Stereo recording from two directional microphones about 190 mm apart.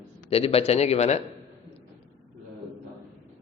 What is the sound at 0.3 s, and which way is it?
Speech, 30° left (ahead or behind).